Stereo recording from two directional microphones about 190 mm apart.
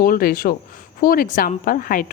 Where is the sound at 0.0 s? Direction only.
50° left (ahead or behind).